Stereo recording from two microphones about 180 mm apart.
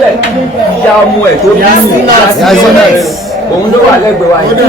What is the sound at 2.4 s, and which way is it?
Speech, centre (ahead or behind).